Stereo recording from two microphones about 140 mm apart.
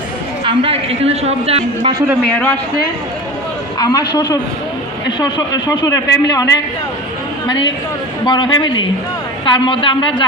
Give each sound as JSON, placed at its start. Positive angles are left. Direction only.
{"t": 0.4, "sound": "a man's voice", "side_deg": -40}
{"t": 2.3, "sound": "a man's voice", "side_deg": 10}
{"t": 3.8, "sound": "a woman's voice", "side_deg": 30}